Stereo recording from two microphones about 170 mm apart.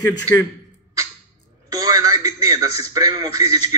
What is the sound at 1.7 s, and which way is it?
A man's voice, 20° right (ahead or behind).